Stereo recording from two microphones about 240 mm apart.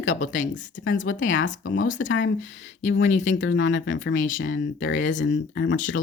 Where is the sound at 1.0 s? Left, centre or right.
Left.